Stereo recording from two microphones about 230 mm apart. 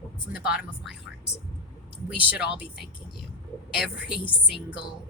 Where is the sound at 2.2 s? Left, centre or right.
Centre.